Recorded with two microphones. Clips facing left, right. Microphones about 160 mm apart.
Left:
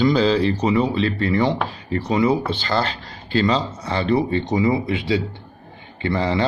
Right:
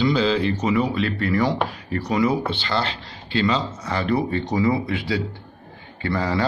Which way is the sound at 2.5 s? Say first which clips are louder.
Left 3 dB; 40° left (ahead or behind).